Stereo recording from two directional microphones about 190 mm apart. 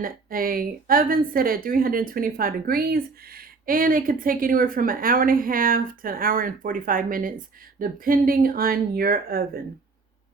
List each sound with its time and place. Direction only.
0.0 s a woman's voice: 50° right (ahead or behind)